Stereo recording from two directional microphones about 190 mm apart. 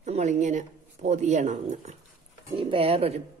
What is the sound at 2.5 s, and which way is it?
Speech, 25° right (ahead or behind).